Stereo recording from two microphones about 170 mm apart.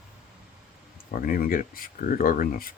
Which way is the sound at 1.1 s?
55° left (ahead or behind).